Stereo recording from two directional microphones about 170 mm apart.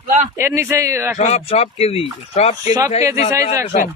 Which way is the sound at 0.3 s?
15° right (ahead or behind).